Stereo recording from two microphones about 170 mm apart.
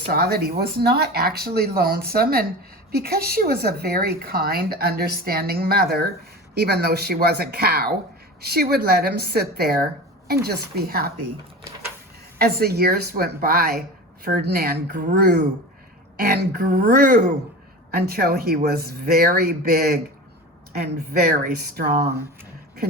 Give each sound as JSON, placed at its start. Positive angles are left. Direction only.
{"t": 0.1, "sound": "a woman's voice", "side_deg": -65}
{"t": 12.4, "sound": "a woman's voice", "side_deg": -65}
{"t": 21.6, "sound": "speech", "side_deg": -70}